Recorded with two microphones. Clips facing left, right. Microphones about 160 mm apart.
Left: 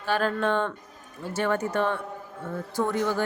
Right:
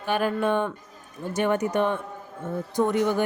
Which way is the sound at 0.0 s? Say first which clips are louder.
Right 1 dB; 15° right (ahead or behind).